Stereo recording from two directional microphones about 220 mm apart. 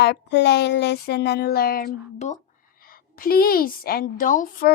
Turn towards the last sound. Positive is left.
turn(degrees=40)  # may be behind; listen again after turning